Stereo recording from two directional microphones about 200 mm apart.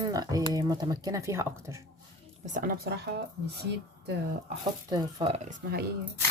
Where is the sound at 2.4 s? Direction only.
40° right (ahead or behind).